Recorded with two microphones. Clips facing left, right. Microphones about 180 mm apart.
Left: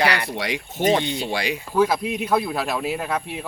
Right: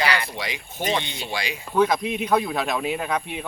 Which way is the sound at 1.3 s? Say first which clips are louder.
Left 1 dB; 60° left (ahead or behind).